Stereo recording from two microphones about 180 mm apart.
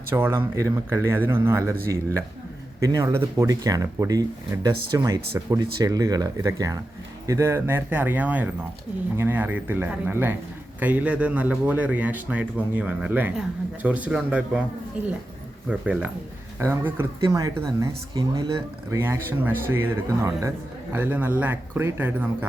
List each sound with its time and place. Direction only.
0.1 s a man's voice: 15° right (ahead or behind)
15.7 s a man's voice: 5° right (ahead or behind)